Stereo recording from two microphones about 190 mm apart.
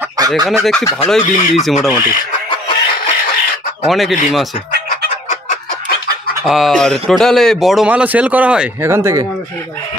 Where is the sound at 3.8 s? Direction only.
Centre (ahead or behind).